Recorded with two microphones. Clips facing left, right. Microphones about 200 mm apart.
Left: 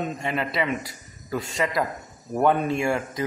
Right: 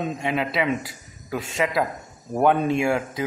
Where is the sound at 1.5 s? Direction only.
5° right (ahead or behind).